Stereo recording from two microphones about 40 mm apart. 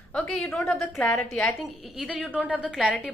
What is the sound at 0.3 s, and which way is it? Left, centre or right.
Speech, left.